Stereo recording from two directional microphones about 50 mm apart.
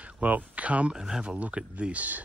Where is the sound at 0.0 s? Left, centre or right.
Right.